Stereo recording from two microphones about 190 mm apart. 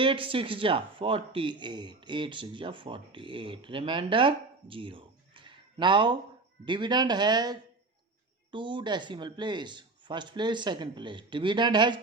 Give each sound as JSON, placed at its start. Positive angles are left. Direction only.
{"t": 0.0, "sound": "speech", "side_deg": -25}